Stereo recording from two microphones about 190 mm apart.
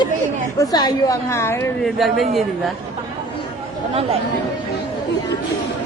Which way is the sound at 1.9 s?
Centre (ahead or behind).